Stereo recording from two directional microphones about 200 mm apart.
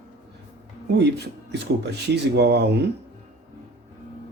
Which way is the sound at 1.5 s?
60° right (ahead or behind).